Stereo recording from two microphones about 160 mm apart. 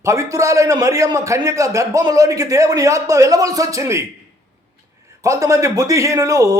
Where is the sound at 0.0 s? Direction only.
20° right (ahead or behind).